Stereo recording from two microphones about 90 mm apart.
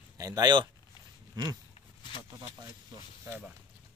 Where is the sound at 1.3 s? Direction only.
45° right (ahead or behind).